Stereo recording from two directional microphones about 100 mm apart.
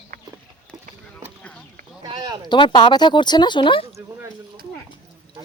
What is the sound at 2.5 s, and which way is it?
Speech, 50° left (ahead or behind).